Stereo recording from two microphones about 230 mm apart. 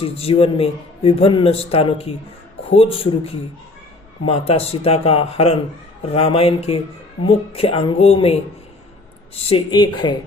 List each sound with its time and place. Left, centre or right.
0.0 s a man's voice: left